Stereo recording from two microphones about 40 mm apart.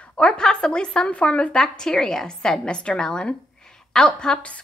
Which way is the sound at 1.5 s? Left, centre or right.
Centre.